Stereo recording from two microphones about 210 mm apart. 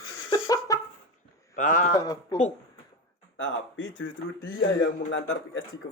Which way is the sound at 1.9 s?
15° left (ahead or behind).